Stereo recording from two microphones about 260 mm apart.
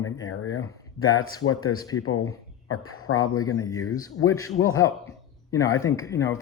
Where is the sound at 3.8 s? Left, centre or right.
Left.